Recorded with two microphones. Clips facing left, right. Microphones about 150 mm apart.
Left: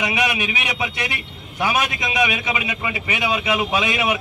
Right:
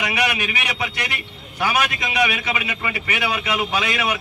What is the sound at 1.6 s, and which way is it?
A man's voice, 20° left (ahead or behind).